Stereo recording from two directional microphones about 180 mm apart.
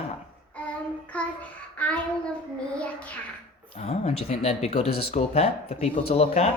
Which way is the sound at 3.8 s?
35° left (ahead or behind).